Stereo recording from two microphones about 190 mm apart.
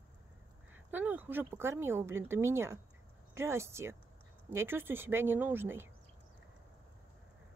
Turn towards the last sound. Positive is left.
turn(degrees=-10)  # may be behind; listen again after turning